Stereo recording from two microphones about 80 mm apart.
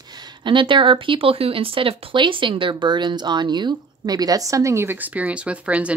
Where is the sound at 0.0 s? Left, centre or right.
Right.